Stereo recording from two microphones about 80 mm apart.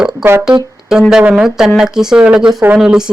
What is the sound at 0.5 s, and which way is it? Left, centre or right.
Speech, right.